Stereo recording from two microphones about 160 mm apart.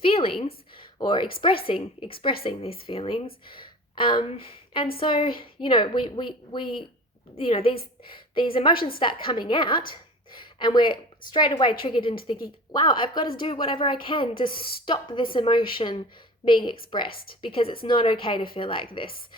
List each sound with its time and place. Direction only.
0.0 s a sound: 35° left (ahead or behind)
0.9 s a woman's voice: 30° left (ahead or behind)
17.1 s a woman's voice: 65° left (ahead or behind)
17.4 s a woman's voice: 35° left (ahead or behind)